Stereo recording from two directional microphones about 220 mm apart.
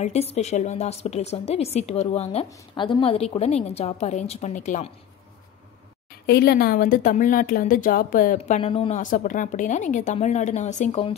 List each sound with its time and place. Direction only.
0.0 s a woman's voice: 30° left (ahead or behind)
6.2 s speech: 50° left (ahead or behind); by 11.1 s 30° left (ahead or behind)